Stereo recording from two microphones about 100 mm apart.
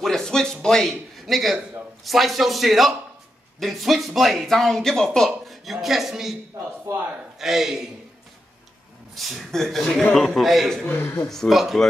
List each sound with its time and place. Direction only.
0.0 s a sound: 5° left (ahead or behind)
2.0 s speech: centre (ahead or behind)
6.9 s a man's voice: 30° right (ahead or behind)
7.3 s speech: 5° right (ahead or behind)
9.1 s speech: centre (ahead or behind)